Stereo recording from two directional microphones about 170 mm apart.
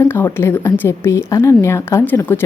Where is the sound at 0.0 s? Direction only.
10° left (ahead or behind).